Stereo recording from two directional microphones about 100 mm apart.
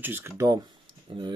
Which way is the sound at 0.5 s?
45° right (ahead or behind).